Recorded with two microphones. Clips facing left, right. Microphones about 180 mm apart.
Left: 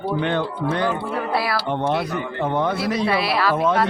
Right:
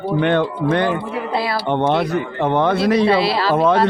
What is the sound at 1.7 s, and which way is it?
A man's voice, 70° right (ahead or behind).